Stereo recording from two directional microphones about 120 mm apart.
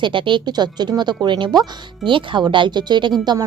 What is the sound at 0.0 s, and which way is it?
A woman's voice, 45° right (ahead or behind).